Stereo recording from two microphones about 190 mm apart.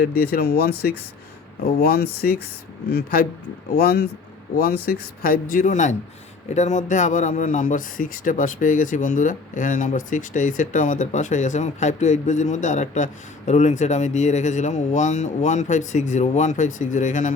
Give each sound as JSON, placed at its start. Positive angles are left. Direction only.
{"t": 0.0, "sound": "a man's voice", "side_deg": 50}